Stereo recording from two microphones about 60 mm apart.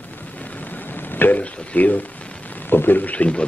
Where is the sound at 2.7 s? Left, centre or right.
Left.